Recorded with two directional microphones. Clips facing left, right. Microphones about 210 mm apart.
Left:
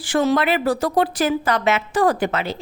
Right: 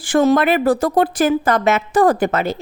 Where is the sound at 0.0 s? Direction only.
50° right (ahead or behind).